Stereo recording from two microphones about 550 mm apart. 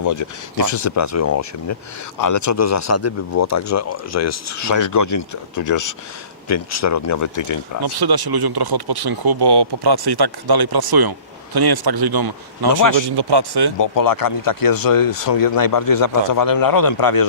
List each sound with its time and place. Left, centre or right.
0.0 s speech: left
7.8 s speech: right
13.7 s speech: left